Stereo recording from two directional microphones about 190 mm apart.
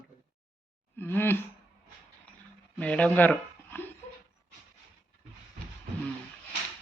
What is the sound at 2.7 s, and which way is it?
Speech, 5° left (ahead or behind).